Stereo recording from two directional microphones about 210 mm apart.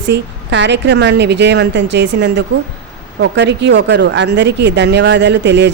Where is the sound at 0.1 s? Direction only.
55° right (ahead or behind).